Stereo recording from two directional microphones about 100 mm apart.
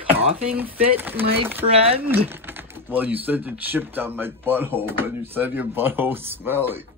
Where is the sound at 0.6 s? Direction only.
20° right (ahead or behind).